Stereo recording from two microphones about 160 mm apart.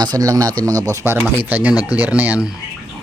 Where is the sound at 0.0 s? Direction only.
25° right (ahead or behind).